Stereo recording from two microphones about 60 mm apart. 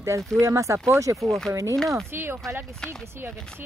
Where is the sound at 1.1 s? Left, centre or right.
Centre.